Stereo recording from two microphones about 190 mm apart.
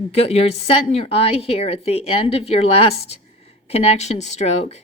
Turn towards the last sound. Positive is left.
turn(degrees=35)  # may be behind; listen again after turning